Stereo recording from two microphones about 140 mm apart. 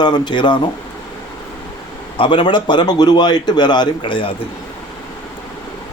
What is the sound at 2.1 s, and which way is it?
Speech, 35° left (ahead or behind).